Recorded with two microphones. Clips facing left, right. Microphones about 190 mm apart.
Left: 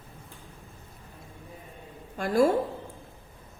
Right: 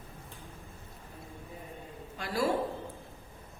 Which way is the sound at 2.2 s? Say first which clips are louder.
Left 9 dB; 50° left (ahead or behind).